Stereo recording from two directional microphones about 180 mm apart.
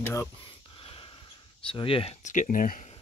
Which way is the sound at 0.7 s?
30° left (ahead or behind).